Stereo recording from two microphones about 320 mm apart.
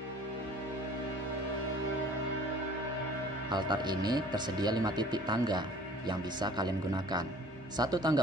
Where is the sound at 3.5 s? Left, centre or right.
Centre.